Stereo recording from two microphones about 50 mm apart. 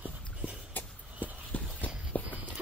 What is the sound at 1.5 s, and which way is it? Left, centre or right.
Walk, left.